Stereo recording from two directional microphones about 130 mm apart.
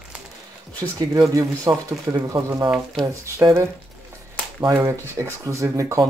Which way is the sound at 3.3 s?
20° right (ahead or behind).